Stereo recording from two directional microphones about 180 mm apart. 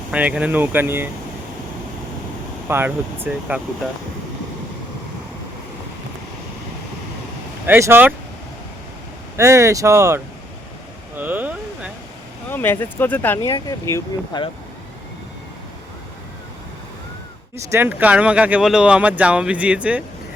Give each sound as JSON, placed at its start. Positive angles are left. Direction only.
{"t": 0.1, "sound": "speech", "side_deg": -5}
{"t": 2.6, "sound": "speech", "side_deg": -10}
{"t": 7.7, "sound": "speech", "side_deg": -10}
{"t": 9.3, "sound": "speech", "side_deg": -15}
{"t": 11.2, "sound": "speech", "side_deg": -10}
{"t": 12.5, "sound": "speech", "side_deg": 10}
{"t": 17.7, "sound": "speech", "side_deg": -10}